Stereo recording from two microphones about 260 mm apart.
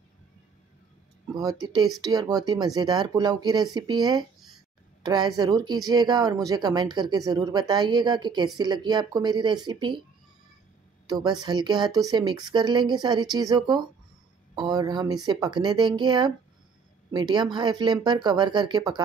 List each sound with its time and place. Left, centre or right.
1.3 s speech: centre
11.1 s speech: centre